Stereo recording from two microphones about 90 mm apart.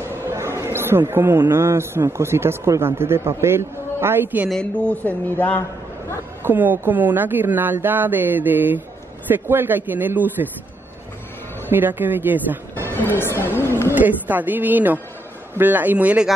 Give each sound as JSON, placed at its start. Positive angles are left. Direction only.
{"t": 0.3, "sound": "chatter", "side_deg": -30}
{"t": 1.5, "sound": "a man's voice", "side_deg": -30}
{"t": 4.5, "sound": "speech", "side_deg": 10}
{"t": 6.4, "sound": "a man's voice", "side_deg": -20}
{"t": 11.7, "sound": "speech", "side_deg": -20}
{"t": 12.9, "sound": "speech", "side_deg": 25}
{"t": 13.9, "sound": "a man's voice", "side_deg": -20}